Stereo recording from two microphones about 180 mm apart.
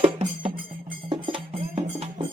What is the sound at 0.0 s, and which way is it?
Music, 30° right (ahead or behind).